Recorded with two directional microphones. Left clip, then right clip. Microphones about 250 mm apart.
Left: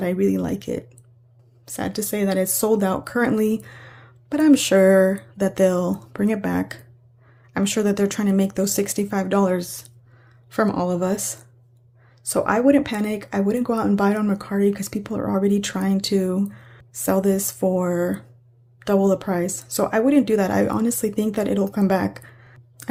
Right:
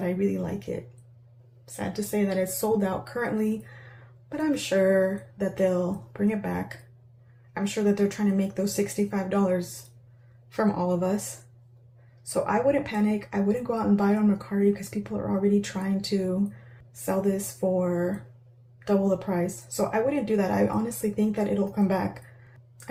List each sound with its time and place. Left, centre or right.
0.0 s speech: left
12.3 s speech: left